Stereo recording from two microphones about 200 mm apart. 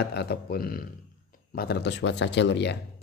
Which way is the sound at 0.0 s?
55° left (ahead or behind).